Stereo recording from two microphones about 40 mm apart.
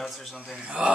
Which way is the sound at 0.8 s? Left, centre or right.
Right.